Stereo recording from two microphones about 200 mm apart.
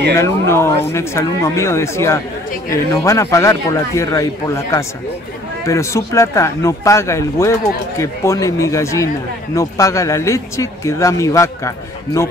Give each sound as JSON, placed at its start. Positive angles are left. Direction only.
{"t": 0.1, "sound": "speech", "side_deg": 10}